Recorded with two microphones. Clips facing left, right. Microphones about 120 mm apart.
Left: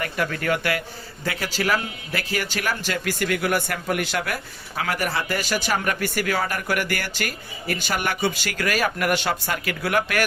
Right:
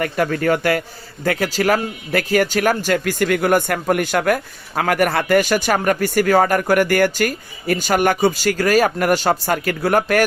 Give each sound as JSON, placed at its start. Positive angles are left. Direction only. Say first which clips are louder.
{"t": 0.0, "sound": "speech", "louder": "right 7 dB", "side_deg": -45}